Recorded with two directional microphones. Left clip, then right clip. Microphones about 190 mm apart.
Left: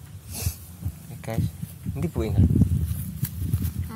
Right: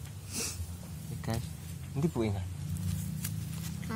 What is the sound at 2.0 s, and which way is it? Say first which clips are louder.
Speech: left 4 dB; 35° left (ahead or behind).